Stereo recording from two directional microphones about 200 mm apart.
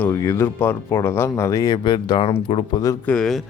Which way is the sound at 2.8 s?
5° left (ahead or behind).